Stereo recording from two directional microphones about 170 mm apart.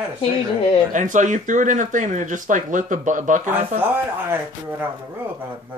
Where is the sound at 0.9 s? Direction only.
50° right (ahead or behind).